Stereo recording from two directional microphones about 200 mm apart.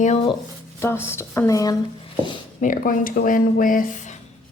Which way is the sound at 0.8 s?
10° left (ahead or behind).